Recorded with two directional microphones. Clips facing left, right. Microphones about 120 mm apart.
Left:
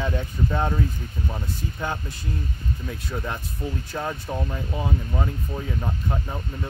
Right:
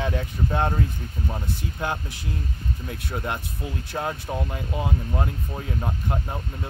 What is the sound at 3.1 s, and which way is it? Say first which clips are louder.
Speech: right 2 dB; 10° right (ahead or behind).